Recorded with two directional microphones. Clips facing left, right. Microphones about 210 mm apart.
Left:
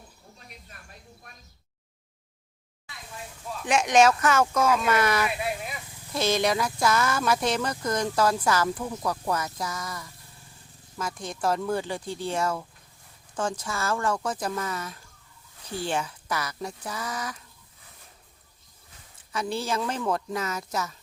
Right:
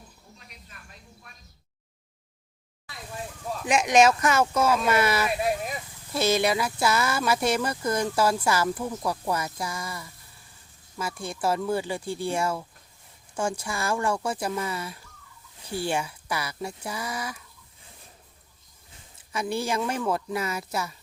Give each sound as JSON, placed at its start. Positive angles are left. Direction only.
{"t": 3.7, "sound": "speech", "side_deg": -10}
{"t": 5.4, "sound": "a sound", "side_deg": -40}
{"t": 6.1, "sound": "speech", "side_deg": -10}
{"t": 19.3, "sound": "speech", "side_deg": -10}